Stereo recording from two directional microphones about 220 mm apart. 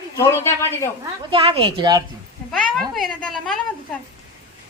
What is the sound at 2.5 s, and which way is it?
A woman's voice, 5° left (ahead or behind).